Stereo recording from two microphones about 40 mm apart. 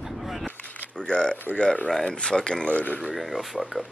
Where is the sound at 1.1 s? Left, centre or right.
Left.